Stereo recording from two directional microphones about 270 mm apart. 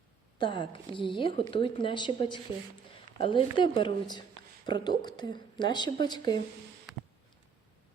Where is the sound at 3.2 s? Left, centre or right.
Centre.